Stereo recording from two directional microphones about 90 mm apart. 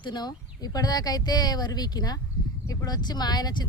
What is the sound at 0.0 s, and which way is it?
Speech, 55° left (ahead or behind).